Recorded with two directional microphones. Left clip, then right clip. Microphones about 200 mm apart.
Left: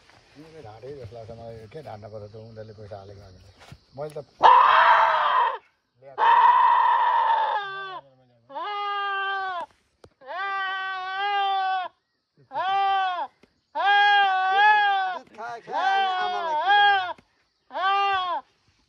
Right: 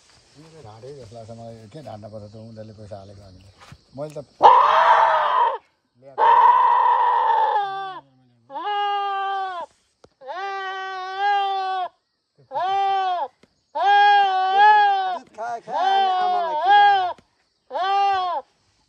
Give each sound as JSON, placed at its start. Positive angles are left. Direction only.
{"t": 0.7, "sound": "speech", "side_deg": -20}
{"t": 4.4, "sound": "dog", "side_deg": -50}
{"t": 6.1, "sound": "goat", "side_deg": -50}
{"t": 8.5, "sound": "bleat", "side_deg": -45}
{"t": 9.4, "sound": "sheep", "side_deg": -45}
{"t": 10.2, "sound": "goat", "side_deg": -55}
{"t": 15.3, "sound": "a sound", "side_deg": -30}
{"t": 15.7, "sound": "bleat", "side_deg": -55}
{"t": 17.6, "sound": "sheep", "side_deg": -50}